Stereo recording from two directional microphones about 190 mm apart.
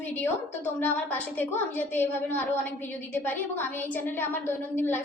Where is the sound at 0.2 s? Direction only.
10° left (ahead or behind).